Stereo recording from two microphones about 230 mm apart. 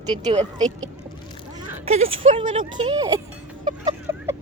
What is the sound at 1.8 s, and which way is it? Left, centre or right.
Speech, right.